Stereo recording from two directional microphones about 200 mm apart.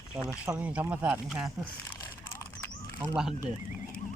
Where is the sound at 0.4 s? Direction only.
5° right (ahead or behind).